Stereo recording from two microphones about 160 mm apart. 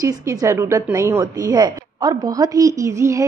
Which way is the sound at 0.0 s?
20° right (ahead or behind).